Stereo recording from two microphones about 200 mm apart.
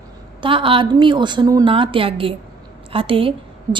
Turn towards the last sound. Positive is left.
turn(degrees=-25)  # may be behind; listen again after turning